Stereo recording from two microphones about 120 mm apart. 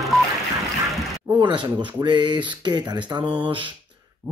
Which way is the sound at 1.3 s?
40° right (ahead or behind).